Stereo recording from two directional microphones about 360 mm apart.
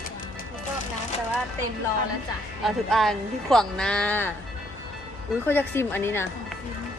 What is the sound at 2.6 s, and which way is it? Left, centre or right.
Speech, centre.